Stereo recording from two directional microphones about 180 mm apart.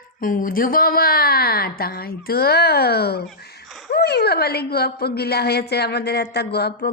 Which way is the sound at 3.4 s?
60° left (ahead or behind).